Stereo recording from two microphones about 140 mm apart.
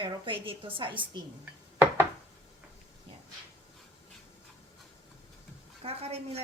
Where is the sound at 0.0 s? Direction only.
40° right (ahead or behind).